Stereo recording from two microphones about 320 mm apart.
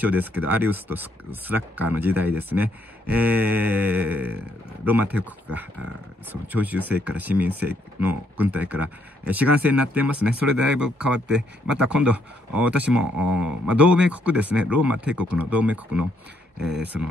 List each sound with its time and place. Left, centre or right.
0.0 s speech: centre
16.5 s speech: right
16.8 s speech: centre